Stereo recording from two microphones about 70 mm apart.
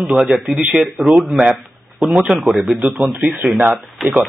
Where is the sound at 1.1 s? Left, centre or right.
Centre.